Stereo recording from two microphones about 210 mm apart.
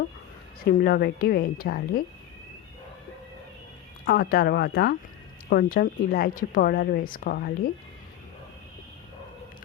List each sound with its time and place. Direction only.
0.6 s a woman's voice: 45° left (ahead or behind)
4.0 s a woman's voice: 45° left (ahead or behind)